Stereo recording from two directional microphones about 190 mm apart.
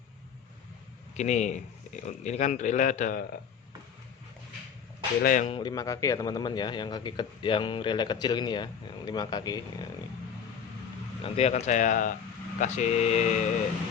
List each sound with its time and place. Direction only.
1.1 s speech: 35° left (ahead or behind)
5.2 s speech: 45° left (ahead or behind)
5.5 s a man's voice: 25° left (ahead or behind)
11.2 s speech: 35° left (ahead or behind)